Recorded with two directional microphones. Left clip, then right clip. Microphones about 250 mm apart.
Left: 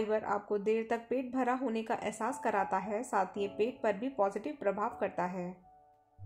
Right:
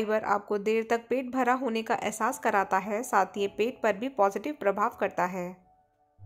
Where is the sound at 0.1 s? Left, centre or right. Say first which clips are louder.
Right 5 dB; right.